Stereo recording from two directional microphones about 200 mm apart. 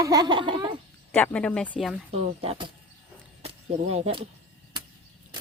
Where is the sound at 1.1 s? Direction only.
5° left (ahead or behind).